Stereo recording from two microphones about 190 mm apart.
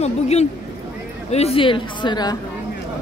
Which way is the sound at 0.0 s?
35° left (ahead or behind).